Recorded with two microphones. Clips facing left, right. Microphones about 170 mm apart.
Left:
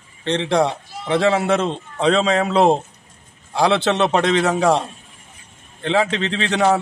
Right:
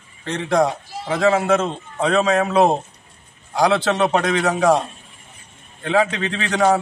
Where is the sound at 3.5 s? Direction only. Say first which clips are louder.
Even; 25° left (ahead or behind).